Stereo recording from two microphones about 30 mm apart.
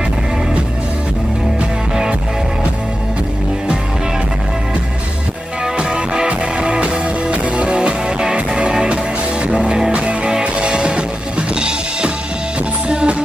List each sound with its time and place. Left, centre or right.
5.8 s music: right